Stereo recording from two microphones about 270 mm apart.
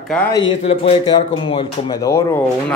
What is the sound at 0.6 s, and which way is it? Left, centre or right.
Speech, left.